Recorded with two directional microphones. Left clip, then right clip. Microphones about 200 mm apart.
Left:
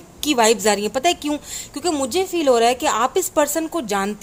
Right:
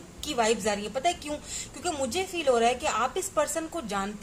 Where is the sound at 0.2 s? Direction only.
40° left (ahead or behind).